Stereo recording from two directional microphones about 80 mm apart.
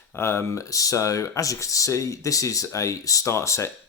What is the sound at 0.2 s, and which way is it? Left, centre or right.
Speech, left.